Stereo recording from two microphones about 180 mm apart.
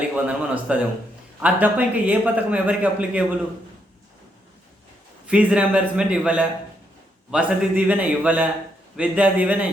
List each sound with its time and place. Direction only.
0.3 s a man's voice: 5° right (ahead or behind)
5.2 s a man's voice: 5° right (ahead or behind)